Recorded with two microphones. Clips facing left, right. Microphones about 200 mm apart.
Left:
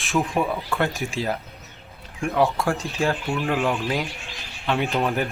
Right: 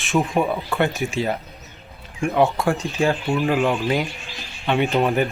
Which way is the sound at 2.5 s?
Centre (ahead or behind).